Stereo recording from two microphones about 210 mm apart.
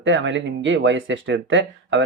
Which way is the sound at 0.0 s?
60° right (ahead or behind).